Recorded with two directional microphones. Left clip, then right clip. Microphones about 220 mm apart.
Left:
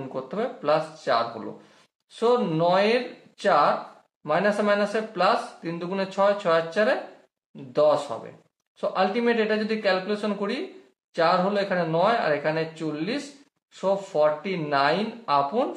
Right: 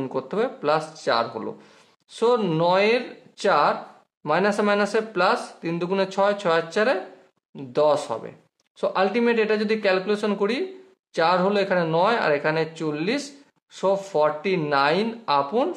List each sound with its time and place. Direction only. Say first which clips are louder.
0.0 s speech: right 4 dB; 40° right (ahead or behind)